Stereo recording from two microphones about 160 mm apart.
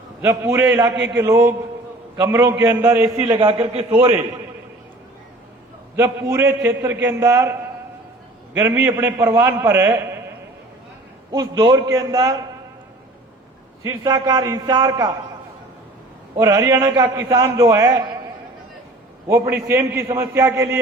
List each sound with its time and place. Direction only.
0.2 s a man's voice: 15° right (ahead or behind)
3.3 s a man's voice: 35° right (ahead or behind)
6.0 s a man's voice: 15° right (ahead or behind)
8.5 s a man's voice: 15° right (ahead or behind)
13.8 s a man's voice: 30° right (ahead or behind)
16.4 s a man's voice: 20° right (ahead or behind)
19.3 s a man's voice: 15° right (ahead or behind)